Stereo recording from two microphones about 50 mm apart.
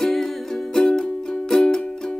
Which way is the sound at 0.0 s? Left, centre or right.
Centre.